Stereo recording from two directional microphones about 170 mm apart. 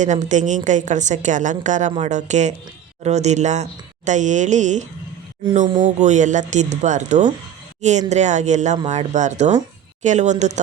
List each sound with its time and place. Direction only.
0.0 s a woman's voice: 45° right (ahead or behind)
5.8 s a woman's voice: 45° right (ahead or behind)